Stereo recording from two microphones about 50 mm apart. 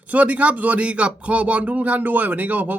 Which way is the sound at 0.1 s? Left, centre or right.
Right.